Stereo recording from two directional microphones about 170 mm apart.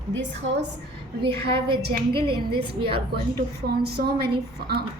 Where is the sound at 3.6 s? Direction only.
70° right (ahead or behind).